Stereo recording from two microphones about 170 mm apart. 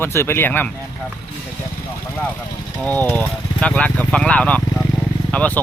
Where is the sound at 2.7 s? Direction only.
5° left (ahead or behind).